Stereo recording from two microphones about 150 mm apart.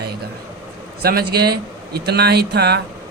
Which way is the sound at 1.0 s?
90° right.